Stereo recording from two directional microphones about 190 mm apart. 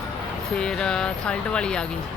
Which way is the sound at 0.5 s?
5° left (ahead or behind).